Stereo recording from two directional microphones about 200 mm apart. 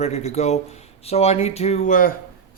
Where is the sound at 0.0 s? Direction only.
35° left (ahead or behind).